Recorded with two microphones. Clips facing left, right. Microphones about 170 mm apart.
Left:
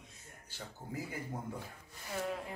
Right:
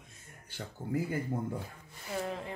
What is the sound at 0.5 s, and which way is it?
Speech, 60° right (ahead or behind).